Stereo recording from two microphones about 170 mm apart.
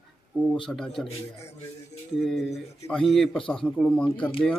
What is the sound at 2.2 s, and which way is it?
A man's voice, centre (ahead or behind).